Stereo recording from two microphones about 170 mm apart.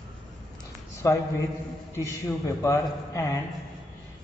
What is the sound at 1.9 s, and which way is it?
A man's voice, 15° left (ahead or behind).